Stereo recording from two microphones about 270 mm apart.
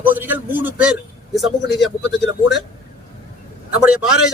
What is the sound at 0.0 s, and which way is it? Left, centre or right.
A man's voice, centre.